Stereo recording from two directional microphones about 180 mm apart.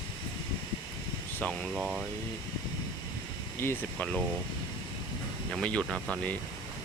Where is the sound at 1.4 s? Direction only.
Centre (ahead or behind).